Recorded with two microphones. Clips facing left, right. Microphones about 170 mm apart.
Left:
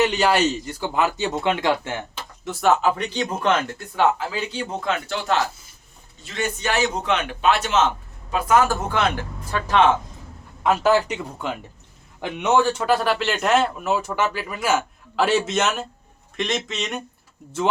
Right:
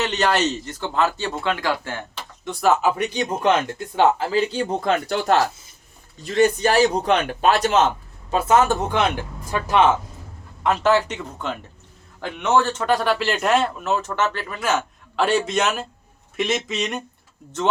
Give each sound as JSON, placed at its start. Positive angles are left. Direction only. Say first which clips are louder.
{"t": 0.0, "sound": "speech", "louder": "left 2 dB", "side_deg": 10}
{"t": 2.4, "sound": "speech", "louder": "even", "side_deg": 0}
{"t": 4.5, "sound": "a man's voice", "louder": "right 4 dB", "side_deg": -35}
{"t": 5.1, "sound": "speech", "louder": "right 4 dB", "side_deg": -50}
{"t": 6.2, "sound": "a man's voice", "louder": "right 8 dB", "side_deg": -40}
{"t": 10.6, "sound": "speech", "louder": "even", "side_deg": 10}